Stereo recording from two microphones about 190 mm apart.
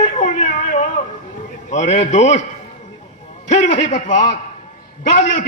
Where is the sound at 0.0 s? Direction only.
40° left (ahead or behind).